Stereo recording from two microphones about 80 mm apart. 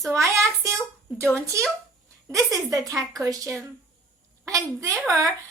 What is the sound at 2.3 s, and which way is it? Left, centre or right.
A woman's voice, right.